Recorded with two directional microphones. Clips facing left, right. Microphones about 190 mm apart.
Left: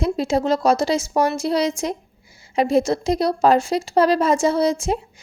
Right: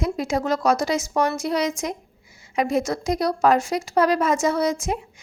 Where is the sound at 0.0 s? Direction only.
30° left (ahead or behind).